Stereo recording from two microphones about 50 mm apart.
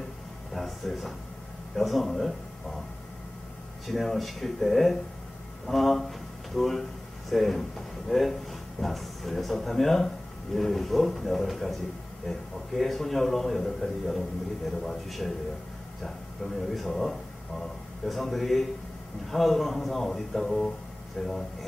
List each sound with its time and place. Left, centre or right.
0.5 s a sound: centre
1.8 s speech: centre
3.8 s speech: centre
16.6 s speech: centre